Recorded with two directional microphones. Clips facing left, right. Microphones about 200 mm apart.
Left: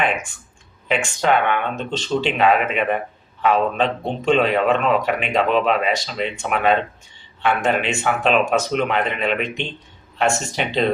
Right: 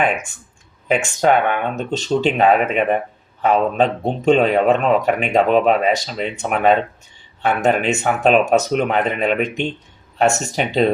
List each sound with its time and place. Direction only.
0.9 s a man's voice: 45° right (ahead or behind)